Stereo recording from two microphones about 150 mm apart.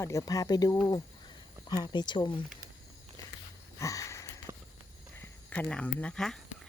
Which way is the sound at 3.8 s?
20° left (ahead or behind).